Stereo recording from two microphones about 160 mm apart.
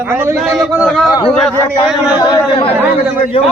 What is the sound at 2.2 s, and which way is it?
Speech, 25° left (ahead or behind).